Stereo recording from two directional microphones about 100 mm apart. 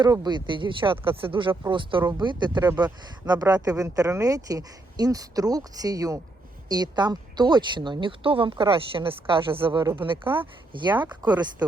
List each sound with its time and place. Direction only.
0.0 s speech: 45° right (ahead or behind)